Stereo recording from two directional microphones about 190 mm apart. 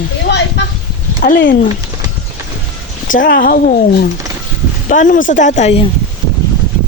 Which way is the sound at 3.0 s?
45° left (ahead or behind).